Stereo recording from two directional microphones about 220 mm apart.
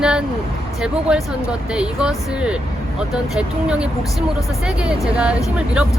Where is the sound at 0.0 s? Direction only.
5° right (ahead or behind).